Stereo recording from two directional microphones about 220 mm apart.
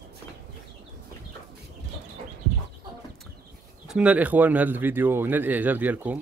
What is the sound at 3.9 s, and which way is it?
Speech, 5° right (ahead or behind).